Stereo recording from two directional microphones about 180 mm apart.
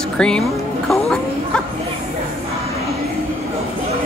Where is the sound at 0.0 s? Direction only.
5° left (ahead or behind).